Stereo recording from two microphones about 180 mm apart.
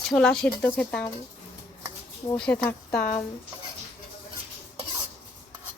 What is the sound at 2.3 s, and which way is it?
Speech, 5° left (ahead or behind).